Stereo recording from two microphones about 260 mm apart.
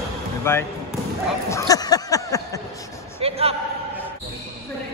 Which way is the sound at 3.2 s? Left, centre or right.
Right.